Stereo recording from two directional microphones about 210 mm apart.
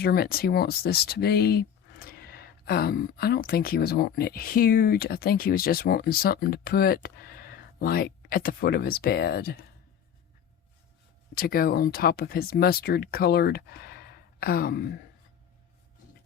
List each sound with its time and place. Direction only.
0.0 s speech: 50° left (ahead or behind)
11.3 s speech: 45° left (ahead or behind)